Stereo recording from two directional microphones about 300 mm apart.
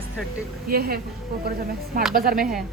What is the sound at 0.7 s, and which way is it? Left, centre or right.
Speech, right.